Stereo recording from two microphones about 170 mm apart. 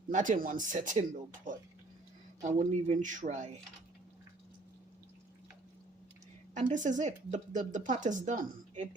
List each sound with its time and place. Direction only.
0.1 s speech: 50° right (ahead or behind)
2.4 s speech: 45° right (ahead or behind)
6.5 s speech: 45° right (ahead or behind)